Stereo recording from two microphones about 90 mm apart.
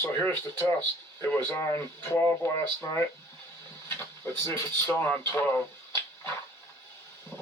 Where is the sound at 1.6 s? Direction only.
35° left (ahead or behind).